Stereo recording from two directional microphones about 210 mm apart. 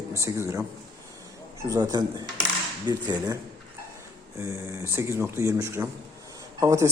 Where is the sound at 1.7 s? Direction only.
20° right (ahead or behind).